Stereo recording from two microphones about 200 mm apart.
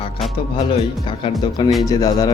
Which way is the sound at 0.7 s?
25° left (ahead or behind).